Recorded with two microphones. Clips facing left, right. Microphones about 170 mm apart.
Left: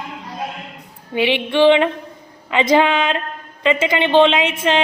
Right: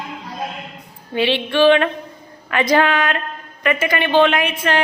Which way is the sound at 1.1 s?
15° left (ahead or behind).